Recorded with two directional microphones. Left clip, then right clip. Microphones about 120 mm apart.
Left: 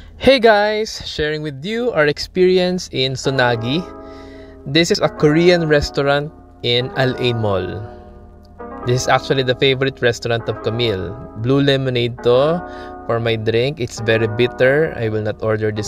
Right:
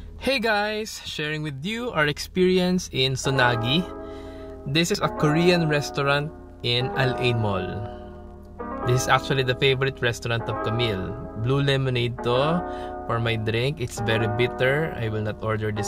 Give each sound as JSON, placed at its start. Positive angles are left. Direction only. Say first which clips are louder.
{"t": 0.2, "sound": "speech", "louder": "left 11 dB", "side_deg": 50}
{"t": 0.8, "sound": "speech", "louder": "left 8 dB", "side_deg": 35}
{"t": 8.8, "sound": "speech", "louder": "left 6 dB", "side_deg": 35}